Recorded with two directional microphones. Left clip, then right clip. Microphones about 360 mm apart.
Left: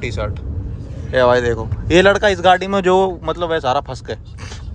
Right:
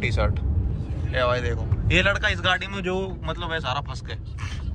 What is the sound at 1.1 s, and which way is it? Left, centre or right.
Speech, left.